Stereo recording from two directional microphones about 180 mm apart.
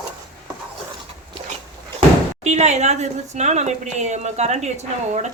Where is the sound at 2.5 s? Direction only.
40° right (ahead or behind).